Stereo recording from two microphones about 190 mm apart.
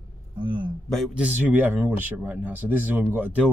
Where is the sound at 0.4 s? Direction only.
25° right (ahead or behind).